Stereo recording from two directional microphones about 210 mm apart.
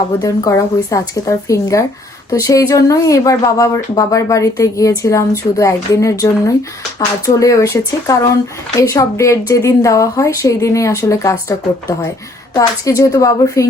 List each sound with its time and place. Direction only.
0.2 s speech: 15° left (ahead or behind)
7.3 s speech: 15° left (ahead or behind)